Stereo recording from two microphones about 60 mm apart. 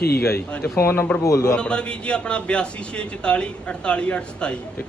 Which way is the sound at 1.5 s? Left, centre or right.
Centre.